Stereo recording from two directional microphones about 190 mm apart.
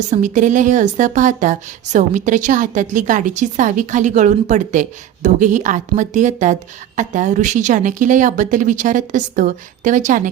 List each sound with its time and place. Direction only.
0.1 s a woman's voice: 40° right (ahead or behind)